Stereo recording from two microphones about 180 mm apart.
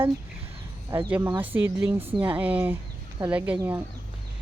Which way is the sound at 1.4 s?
15° right (ahead or behind).